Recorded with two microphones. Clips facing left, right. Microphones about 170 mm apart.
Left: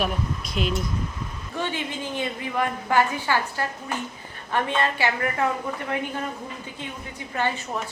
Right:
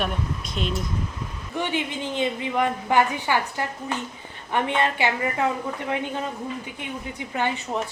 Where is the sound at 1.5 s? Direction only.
15° right (ahead or behind).